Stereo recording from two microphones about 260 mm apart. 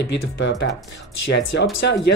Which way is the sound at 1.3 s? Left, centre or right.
Left.